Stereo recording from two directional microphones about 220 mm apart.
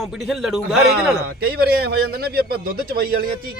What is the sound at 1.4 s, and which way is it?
A man's voice, 45° right (ahead or behind).